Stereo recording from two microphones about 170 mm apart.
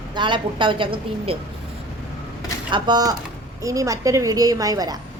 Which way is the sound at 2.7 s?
25° right (ahead or behind).